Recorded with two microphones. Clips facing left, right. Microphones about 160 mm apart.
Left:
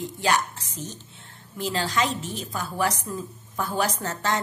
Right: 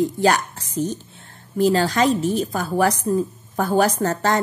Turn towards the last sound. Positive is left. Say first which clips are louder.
# right 7 dB
turn(degrees=-45)  # may be behind; listen again after turning